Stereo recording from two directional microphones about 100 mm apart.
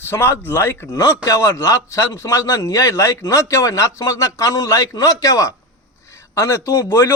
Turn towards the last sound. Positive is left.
turn(degrees=25)  # may be behind; listen again after turning